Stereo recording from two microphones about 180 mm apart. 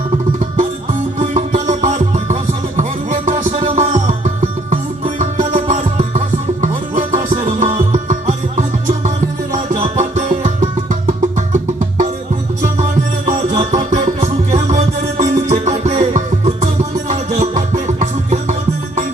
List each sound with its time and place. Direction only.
0.3 s music: 45° right (ahead or behind)
13.6 s music: 40° right (ahead or behind)